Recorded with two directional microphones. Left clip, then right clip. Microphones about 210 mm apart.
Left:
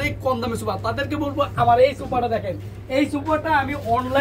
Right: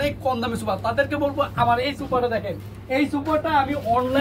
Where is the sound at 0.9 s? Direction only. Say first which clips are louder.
Right 2 dB; 10° left (ahead or behind).